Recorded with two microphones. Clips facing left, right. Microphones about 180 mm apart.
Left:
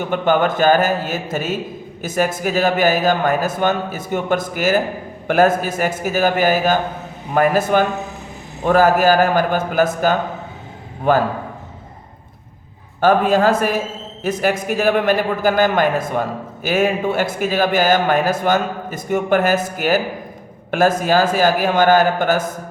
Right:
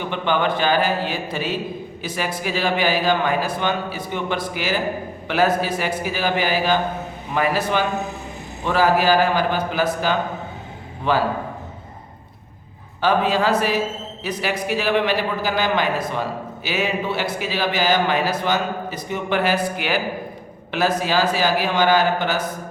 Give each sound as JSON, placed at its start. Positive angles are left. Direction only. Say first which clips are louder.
{"t": 0.0, "sound": "a man's voice", "louder": "left 5 dB", "side_deg": 45}
{"t": 11.1, "sound": "a man's voice", "louder": "left 5 dB", "side_deg": 45}
{"t": 13.0, "sound": "a man's voice", "louder": "left 5 dB", "side_deg": 50}